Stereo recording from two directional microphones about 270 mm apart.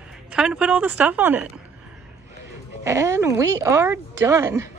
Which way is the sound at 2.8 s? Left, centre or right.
Centre.